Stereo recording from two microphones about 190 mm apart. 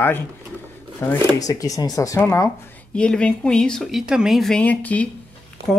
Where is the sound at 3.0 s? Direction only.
5° left (ahead or behind).